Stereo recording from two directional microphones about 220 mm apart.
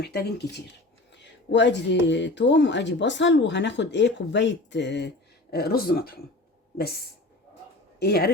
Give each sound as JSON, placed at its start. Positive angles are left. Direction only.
{"t": 0.0, "sound": "speech", "side_deg": 50}
{"t": 7.9, "sound": "speech", "side_deg": 45}